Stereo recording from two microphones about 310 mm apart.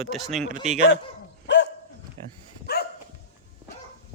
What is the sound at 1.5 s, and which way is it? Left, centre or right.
Dog, left.